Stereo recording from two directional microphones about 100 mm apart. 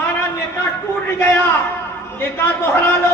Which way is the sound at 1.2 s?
25° left (ahead or behind).